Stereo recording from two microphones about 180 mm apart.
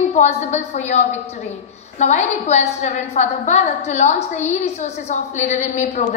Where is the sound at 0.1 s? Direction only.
40° left (ahead or behind).